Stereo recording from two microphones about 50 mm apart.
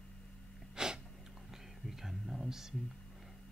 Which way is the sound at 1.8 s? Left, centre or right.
Centre.